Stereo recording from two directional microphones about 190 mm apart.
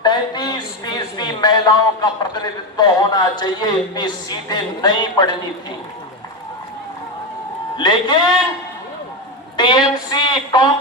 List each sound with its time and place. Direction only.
0.0 s speech: 20° left (ahead or behind)
7.8 s speech: 25° left (ahead or behind)
9.6 s speech: 20° left (ahead or behind)